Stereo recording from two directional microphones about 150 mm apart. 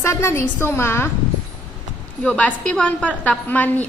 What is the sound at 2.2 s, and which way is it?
A woman's voice, 10° left (ahead or behind).